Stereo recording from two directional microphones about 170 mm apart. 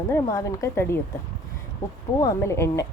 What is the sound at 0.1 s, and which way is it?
Speech, 15° left (ahead or behind).